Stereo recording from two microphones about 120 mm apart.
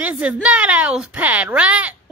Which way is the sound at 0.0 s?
10° right (ahead or behind).